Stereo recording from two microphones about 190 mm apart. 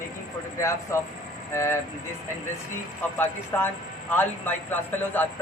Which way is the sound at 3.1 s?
10° left (ahead or behind).